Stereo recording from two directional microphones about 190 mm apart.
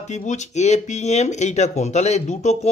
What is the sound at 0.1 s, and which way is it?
Speech, 35° left (ahead or behind).